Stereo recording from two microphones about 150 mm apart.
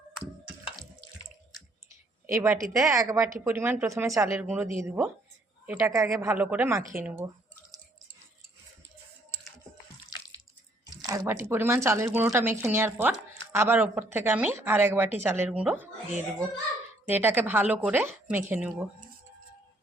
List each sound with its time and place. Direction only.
1.9 s a woman's voice: 20° right (ahead or behind)
6.2 s speech: 10° right (ahead or behind)
10.8 s speech: 25° right (ahead or behind); by 15.9 s 10° right (ahead or behind)
17.1 s speech: 15° right (ahead or behind)